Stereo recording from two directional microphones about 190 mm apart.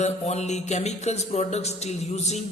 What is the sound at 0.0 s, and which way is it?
Music, 35° left (ahead or behind).